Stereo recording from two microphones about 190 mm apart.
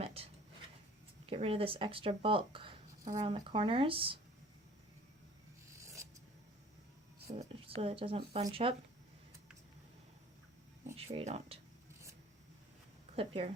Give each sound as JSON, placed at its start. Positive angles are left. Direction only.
{"t": 0.0, "sound": "a sound", "side_deg": -30}
{"t": 1.3, "sound": "speech", "side_deg": -30}
{"t": 7.3, "sound": "speech", "side_deg": -35}
{"t": 10.9, "sound": "speech", "side_deg": -30}
{"t": 13.1, "sound": "speech", "side_deg": -30}